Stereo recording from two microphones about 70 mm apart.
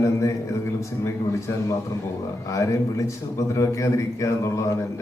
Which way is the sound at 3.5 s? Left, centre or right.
Left.